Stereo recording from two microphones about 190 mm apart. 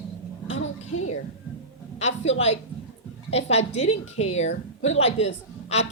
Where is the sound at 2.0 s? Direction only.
35° left (ahead or behind).